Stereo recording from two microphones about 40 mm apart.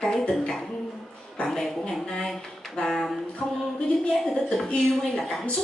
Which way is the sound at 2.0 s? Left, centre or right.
Centre.